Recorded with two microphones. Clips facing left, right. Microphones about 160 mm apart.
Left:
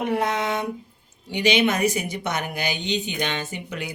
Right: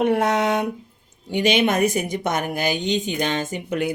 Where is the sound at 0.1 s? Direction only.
65° right (ahead or behind).